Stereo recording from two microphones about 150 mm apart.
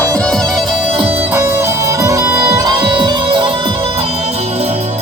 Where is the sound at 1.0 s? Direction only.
15° right (ahead or behind); by 3.7 s 35° right (ahead or behind).